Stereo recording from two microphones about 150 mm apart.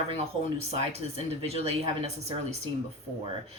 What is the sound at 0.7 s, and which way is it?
Speech, 40° right (ahead or behind).